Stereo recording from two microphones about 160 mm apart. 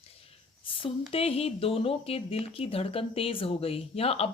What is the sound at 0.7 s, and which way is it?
Speech, 35° left (ahead or behind).